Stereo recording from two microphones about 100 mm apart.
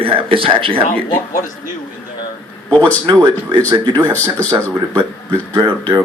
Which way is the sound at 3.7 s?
45° right (ahead or behind).